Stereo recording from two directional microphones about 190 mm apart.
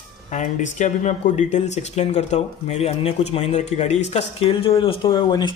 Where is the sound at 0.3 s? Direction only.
40° left (ahead or behind).